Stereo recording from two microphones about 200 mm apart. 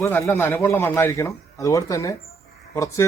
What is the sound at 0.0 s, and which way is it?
Speech, 15° left (ahead or behind).